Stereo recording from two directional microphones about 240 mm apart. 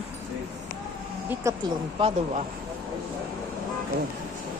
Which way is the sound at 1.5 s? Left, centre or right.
Centre.